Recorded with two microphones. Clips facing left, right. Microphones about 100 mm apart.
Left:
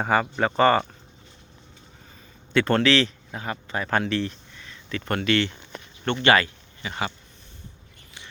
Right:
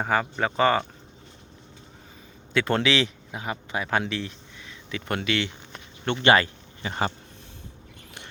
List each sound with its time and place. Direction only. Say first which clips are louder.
0.0 s speech: left 2 dB; centre (ahead or behind)
2.5 s a man's voice: left 3 dB; 5° right (ahead or behind)
6.2 s speech: even; 25° right (ahead or behind)
6.8 s speech: right 2 dB; 35° right (ahead or behind)